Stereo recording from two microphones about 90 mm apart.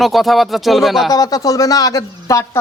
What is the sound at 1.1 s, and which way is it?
A woman's voice, 45° left (ahead or behind).